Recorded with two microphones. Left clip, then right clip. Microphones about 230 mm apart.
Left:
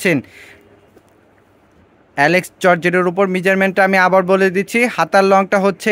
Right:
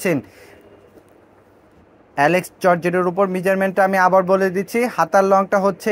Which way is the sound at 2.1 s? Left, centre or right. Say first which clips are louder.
Left 3 dB; left.